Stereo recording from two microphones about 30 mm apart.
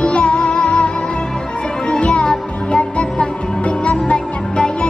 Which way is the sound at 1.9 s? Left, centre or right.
Left.